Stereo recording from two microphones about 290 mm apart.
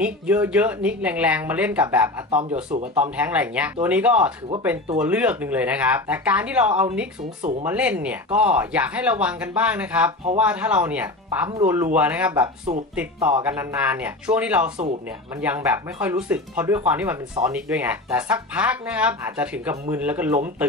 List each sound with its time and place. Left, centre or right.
0.0 s speech: centre
2.3 s speech: right
3.0 s speech: centre